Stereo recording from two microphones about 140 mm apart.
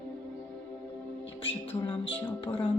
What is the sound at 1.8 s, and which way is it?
Speech, 40° left (ahead or behind).